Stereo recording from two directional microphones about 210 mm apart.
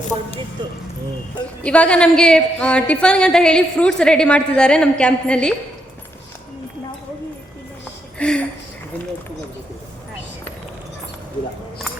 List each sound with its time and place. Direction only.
1.6 s a woman's voice: 5° left (ahead or behind)
8.2 s a woman's voice: 5° left (ahead or behind)